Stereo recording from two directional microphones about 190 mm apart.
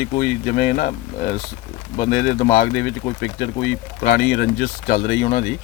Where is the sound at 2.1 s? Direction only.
50° left (ahead or behind).